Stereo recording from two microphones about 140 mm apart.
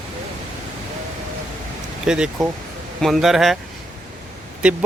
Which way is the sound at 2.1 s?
5° right (ahead or behind).